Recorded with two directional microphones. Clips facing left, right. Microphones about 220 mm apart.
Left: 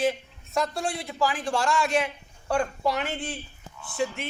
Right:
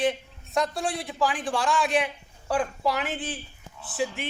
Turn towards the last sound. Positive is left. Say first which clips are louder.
# left 1 dB
turn(degrees=0)  # may be behind; listen again after turning